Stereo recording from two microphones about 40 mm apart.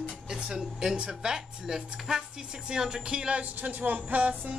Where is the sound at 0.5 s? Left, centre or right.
Centre; by 3.7 s right.